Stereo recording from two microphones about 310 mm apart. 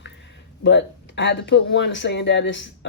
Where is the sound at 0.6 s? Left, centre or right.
Left.